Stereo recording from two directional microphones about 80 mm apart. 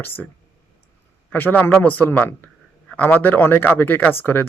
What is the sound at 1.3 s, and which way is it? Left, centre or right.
Speech, left.